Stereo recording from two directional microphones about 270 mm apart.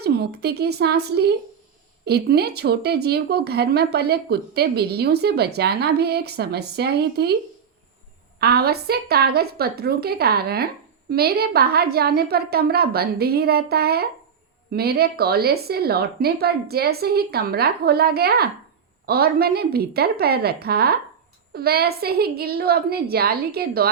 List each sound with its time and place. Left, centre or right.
0.0 s speech: right
8.4 s speech: right